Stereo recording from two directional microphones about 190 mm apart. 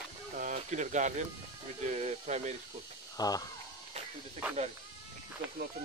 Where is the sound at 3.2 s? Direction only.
20° left (ahead or behind).